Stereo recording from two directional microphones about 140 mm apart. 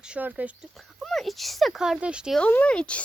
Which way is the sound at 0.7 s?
Centre (ahead or behind).